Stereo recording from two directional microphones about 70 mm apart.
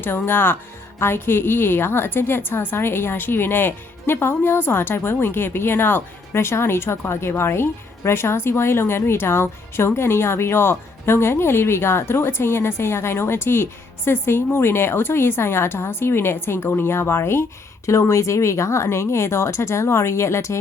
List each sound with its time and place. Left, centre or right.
0.0 s a woman's voice: left
18.1 s speech: left